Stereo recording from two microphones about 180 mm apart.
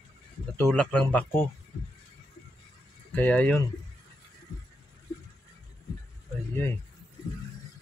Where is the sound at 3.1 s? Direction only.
10° left (ahead or behind).